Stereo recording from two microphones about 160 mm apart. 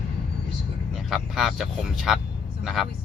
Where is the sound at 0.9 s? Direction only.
Centre (ahead or behind).